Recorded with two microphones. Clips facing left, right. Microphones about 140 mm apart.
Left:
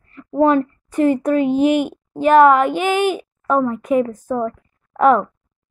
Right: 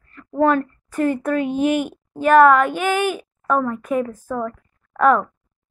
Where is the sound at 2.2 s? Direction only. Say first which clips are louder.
Left 1 dB; 15° left (ahead or behind).